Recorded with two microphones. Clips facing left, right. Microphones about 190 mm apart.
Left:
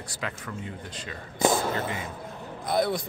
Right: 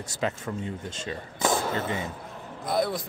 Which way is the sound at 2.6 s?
Centre (ahead or behind).